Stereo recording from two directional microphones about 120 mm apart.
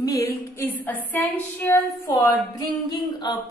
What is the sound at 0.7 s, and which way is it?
Speech, 15° left (ahead or behind).